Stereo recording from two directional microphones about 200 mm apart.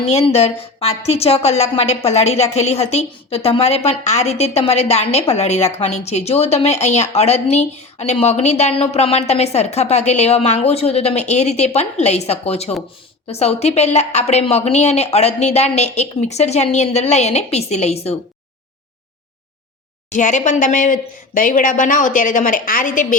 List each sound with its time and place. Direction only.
0.1 s speech: 30° left (ahead or behind)
20.1 s speech: 40° left (ahead or behind)